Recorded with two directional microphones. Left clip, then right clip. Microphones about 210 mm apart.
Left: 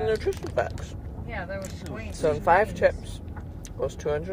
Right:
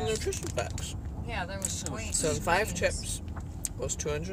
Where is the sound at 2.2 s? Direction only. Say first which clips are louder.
Left 8 dB; 25° right (ahead or behind).